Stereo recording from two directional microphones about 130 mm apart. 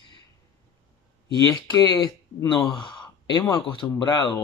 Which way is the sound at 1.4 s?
30° left (ahead or behind).